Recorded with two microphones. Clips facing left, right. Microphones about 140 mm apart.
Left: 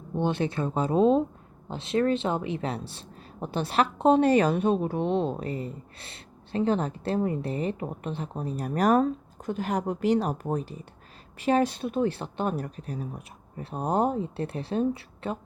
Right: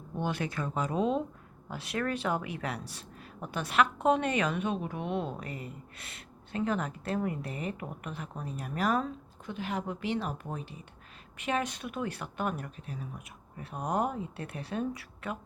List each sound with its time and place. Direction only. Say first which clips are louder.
0.2 s speech: left 6 dB; 25° left (ahead or behind)